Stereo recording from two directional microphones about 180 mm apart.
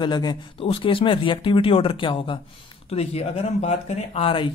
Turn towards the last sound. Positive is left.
turn(degrees=30)  # may be behind; listen again after turning